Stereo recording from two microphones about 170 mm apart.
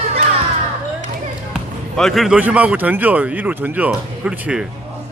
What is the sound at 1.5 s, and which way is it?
Speech, centre (ahead or behind).